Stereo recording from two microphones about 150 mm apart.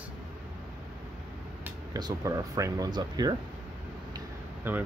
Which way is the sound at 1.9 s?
25° right (ahead or behind).